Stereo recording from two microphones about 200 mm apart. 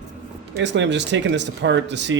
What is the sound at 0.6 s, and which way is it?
Speech, 65° right (ahead or behind).